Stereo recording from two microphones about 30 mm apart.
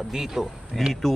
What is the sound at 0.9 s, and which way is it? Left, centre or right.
Speech, centre.